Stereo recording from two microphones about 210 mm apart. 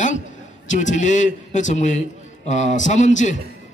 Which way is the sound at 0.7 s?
35° left (ahead or behind).